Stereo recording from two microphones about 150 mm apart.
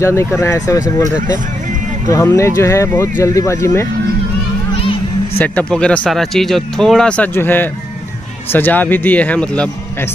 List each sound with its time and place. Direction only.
0.0 s speech: 20° left (ahead or behind)
2.0 s speech: 20° left (ahead or behind)
5.4 s speech: 10° left (ahead or behind)